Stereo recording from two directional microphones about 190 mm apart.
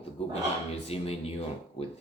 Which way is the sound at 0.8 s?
30° left (ahead or behind).